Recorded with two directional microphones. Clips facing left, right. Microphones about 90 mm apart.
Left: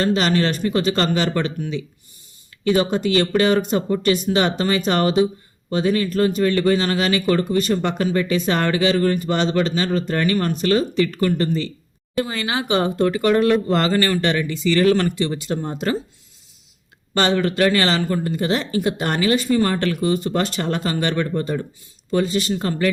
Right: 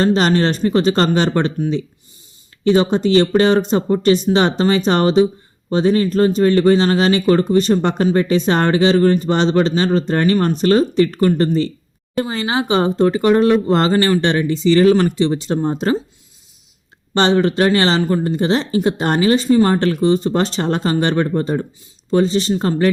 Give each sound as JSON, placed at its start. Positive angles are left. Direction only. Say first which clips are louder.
{"t": 0.0, "sound": "speech", "louder": "right 4 dB", "side_deg": -35}
{"t": 17.2, "sound": "speech", "louder": "right 4 dB", "side_deg": -30}